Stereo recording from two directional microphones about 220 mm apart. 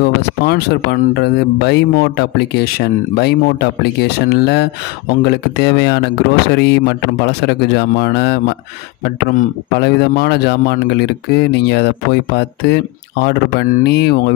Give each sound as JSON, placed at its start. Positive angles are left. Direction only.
{"t": 0.0, "sound": "speech", "side_deg": 45}